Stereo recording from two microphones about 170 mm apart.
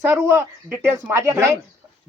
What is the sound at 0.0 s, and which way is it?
Speech, 10° right (ahead or behind).